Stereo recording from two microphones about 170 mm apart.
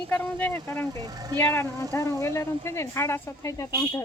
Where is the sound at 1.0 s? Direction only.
20° right (ahead or behind).